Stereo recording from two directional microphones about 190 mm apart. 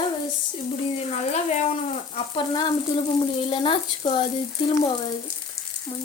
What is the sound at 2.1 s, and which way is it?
A woman's voice, 25° left (ahead or behind).